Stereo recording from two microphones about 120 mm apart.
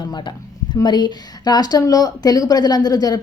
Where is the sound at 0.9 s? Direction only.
35° left (ahead or behind).